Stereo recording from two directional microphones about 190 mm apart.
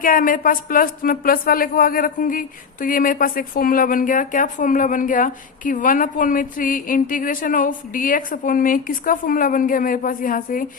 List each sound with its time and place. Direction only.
0.0 s speech: 45° left (ahead or behind)